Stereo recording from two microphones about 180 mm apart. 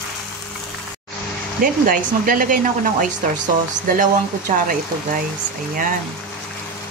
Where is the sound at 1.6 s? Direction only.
55° right (ahead or behind).